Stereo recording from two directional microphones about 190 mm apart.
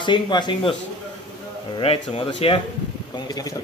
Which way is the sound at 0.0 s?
25° left (ahead or behind).